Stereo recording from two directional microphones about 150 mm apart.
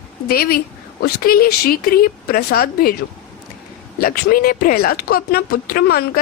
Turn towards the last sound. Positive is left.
turn(degrees=85)